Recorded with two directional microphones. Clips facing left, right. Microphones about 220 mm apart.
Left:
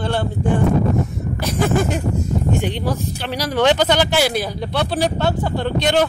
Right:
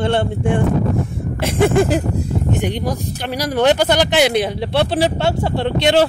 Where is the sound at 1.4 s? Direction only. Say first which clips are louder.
Right 4 dB; 25° right (ahead or behind).